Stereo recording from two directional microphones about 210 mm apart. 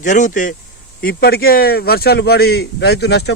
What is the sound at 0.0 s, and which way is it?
A man's voice, 35° left (ahead or behind).